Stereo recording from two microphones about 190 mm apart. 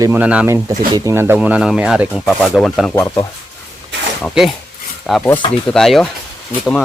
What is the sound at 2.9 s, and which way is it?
Speech, 20° left (ahead or behind).